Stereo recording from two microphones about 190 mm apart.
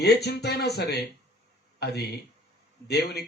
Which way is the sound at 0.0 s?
60° left (ahead or behind).